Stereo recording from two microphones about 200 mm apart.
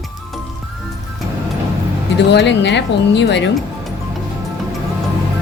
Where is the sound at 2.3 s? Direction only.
60° left (ahead or behind).